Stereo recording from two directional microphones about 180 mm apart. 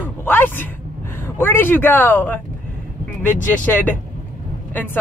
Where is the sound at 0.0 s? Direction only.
10° left (ahead or behind).